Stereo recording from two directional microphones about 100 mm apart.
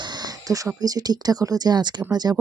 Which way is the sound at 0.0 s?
45° right (ahead or behind).